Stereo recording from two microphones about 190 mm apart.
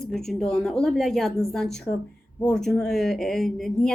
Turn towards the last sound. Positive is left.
turn(degrees=0)  # may be behind; listen again after turning